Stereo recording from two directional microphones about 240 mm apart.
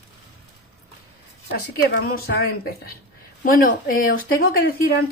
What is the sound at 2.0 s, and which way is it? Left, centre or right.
Speech, left.